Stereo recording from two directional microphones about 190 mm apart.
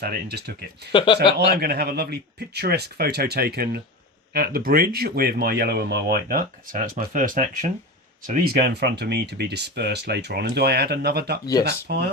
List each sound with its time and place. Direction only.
0.0 s speech: 55° right (ahead or behind)
0.9 s speech: 25° left (ahead or behind)
1.5 s speech: 55° right (ahead or behind)
8.3 s speech: 55° right (ahead or behind)